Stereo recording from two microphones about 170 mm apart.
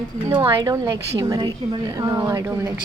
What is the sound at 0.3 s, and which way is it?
A woman's voice, 25° right (ahead or behind).